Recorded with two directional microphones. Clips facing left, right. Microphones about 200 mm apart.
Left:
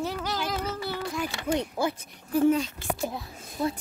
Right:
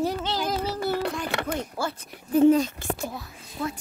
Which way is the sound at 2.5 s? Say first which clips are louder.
Right 4 dB; 45° right (ahead or behind).